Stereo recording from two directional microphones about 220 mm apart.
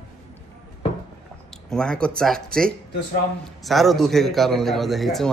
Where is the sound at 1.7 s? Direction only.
5° left (ahead or behind).